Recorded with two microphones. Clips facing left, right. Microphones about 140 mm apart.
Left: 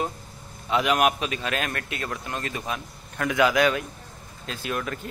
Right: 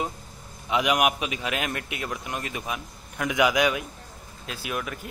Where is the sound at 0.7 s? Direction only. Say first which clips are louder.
Left 1 dB; 15° right (ahead or behind).